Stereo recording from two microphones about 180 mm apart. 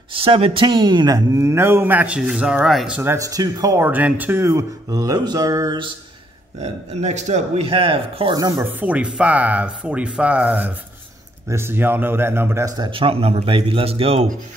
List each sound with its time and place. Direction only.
0.1 s speech: 30° right (ahead or behind); by 3.0 s centre (ahead or behind)
3.0 s speech: 15° right (ahead or behind)
6.6 s speech: 40° right (ahead or behind)
8.4 s speech: 15° right (ahead or behind); by 14.2 s 35° right (ahead or behind)